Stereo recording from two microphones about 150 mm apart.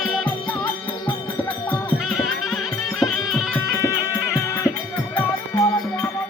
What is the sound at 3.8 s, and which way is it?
Music, 20° left (ahead or behind).